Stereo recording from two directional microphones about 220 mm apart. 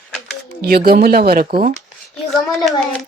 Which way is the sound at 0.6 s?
45° right (ahead or behind).